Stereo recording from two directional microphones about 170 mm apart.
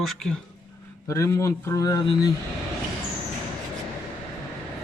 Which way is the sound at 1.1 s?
15° left (ahead or behind).